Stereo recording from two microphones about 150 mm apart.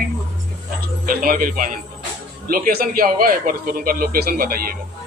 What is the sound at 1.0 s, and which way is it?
Speech, 70° right (ahead or behind).